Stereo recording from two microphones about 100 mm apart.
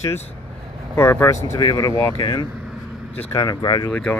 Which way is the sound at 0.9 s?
25° left (ahead or behind).